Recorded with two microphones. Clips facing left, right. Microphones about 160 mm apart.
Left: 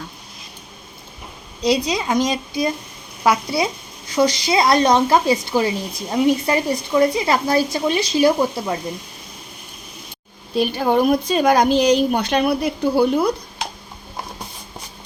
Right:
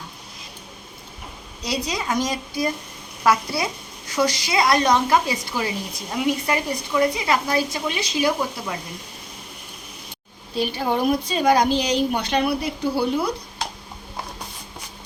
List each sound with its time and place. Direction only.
1.6 s speech: 20° left (ahead or behind)
10.5 s a woman's voice: 55° left (ahead or behind)